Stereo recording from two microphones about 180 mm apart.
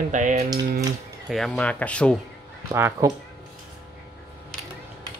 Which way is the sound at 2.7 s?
15° right (ahead or behind).